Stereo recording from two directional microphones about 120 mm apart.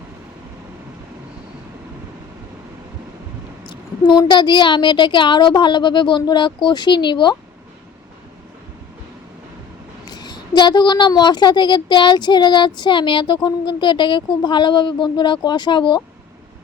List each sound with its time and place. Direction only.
4.2 s a woman's voice: 40° left (ahead or behind)
10.1 s a woman's voice: 35° left (ahead or behind)